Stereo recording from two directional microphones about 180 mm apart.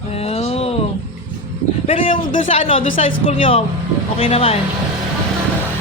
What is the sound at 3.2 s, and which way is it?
Speech, 30° left (ahead or behind).